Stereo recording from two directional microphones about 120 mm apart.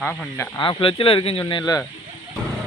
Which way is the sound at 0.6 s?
45° left (ahead or behind).